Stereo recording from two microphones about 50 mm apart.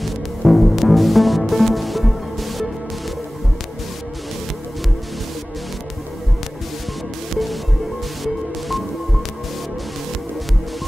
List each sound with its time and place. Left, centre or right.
0.0 s music: centre
8.2 s music: centre